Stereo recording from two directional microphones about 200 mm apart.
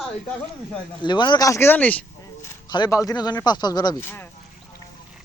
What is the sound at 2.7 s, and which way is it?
Speech, 20° left (ahead or behind).